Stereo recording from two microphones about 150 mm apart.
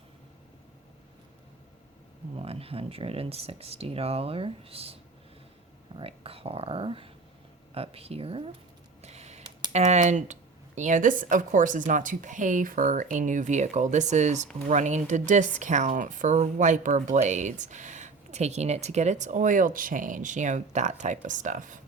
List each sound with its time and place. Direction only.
2.3 s speech: 40° right (ahead or behind)
6.0 s speech: 40° right (ahead or behind)
9.0 s a sound: 50° right (ahead or behind)
9.7 s speech: 50° right (ahead or behind)